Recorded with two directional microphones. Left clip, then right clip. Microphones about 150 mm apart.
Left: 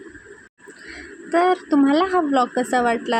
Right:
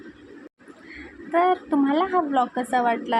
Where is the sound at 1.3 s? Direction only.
25° left (ahead or behind).